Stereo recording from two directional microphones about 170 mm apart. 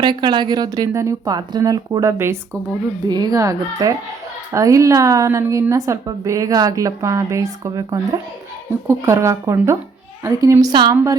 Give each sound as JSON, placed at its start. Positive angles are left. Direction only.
{"t": 0.0, "sound": "a woman's voice", "side_deg": -25}